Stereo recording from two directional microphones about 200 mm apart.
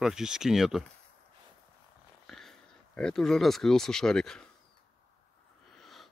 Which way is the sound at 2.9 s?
5° left (ahead or behind).